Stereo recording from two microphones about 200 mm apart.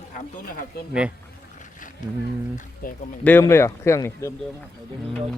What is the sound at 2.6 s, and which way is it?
Speech, 40° left (ahead or behind).